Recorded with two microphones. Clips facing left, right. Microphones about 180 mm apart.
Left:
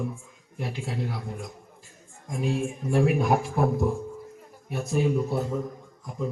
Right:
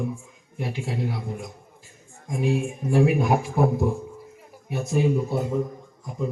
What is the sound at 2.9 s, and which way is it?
Speech, 5° right (ahead or behind).